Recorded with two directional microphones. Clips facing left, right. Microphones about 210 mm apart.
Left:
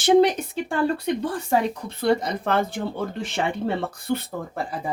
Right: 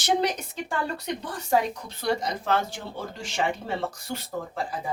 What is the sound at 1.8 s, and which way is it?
Speech, 55° left (ahead or behind).